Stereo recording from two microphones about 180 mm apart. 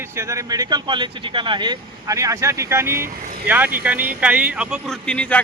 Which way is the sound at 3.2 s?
55° right (ahead or behind).